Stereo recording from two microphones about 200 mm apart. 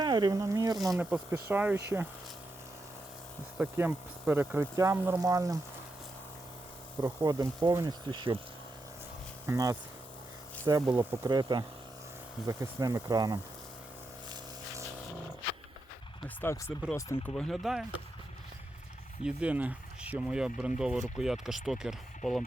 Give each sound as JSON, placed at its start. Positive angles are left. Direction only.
{"t": 0.0, "sound": "speech", "side_deg": -20}
{"t": 0.8, "sound": "speech", "side_deg": -5}
{"t": 3.6, "sound": "speech", "side_deg": -10}
{"t": 7.0, "sound": "speech", "side_deg": -15}
{"t": 9.5, "sound": "speech", "side_deg": -15}
{"t": 16.4, "sound": "speech", "side_deg": 10}
{"t": 17.3, "sound": "speech", "side_deg": 0}
{"t": 19.2, "sound": "speech", "side_deg": -5}